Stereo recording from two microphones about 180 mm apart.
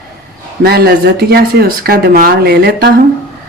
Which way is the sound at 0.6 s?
65° right (ahead or behind).